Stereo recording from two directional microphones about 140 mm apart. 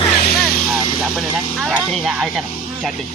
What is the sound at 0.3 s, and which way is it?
Vehicle, 90° left.